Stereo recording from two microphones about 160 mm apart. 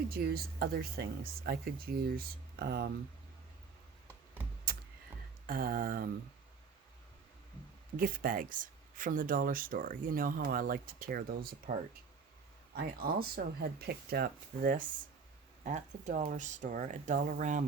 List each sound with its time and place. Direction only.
0.6 s speech: 70° right (ahead or behind)
5.5 s speech: 65° right (ahead or behind)
7.9 s speech: 60° right (ahead or behind)
12.7 s speech: 70° right (ahead or behind)
15.6 s speech: 50° right (ahead or behind)